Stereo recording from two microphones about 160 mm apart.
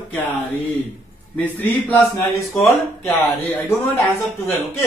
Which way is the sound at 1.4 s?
10° left (ahead or behind).